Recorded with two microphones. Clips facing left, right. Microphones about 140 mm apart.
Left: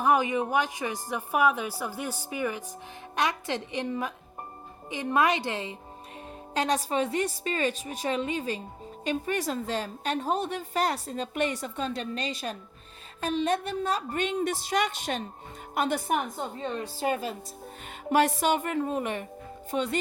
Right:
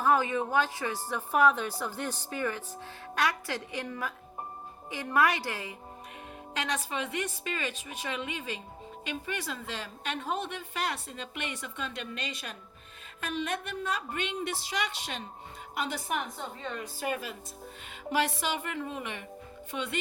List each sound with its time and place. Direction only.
0.0 s a woman's voice: 15° left (ahead or behind)
6.5 s a woman's voice: 35° left (ahead or behind)
18.1 s a woman's voice: 45° left (ahead or behind)